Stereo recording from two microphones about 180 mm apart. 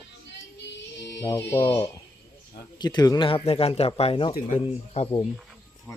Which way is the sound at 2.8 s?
25° left (ahead or behind).